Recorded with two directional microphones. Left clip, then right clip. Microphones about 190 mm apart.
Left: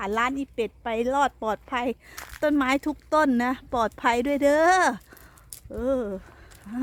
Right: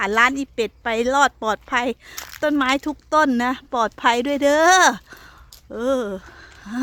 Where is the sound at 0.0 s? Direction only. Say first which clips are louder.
Right 8 dB; 20° right (ahead or behind).